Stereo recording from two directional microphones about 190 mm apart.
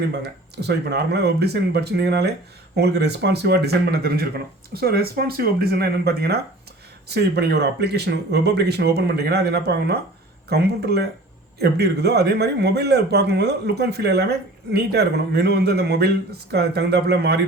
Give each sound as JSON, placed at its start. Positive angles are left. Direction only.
{"t": 0.1, "sound": "speech", "side_deg": -60}